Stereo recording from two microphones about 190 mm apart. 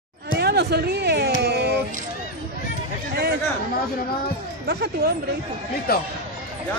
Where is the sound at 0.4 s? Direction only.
60° right (ahead or behind).